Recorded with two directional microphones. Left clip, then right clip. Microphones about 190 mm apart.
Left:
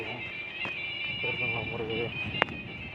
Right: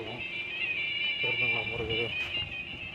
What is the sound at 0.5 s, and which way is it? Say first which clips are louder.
Music: right 4 dB; 45° left (ahead or behind).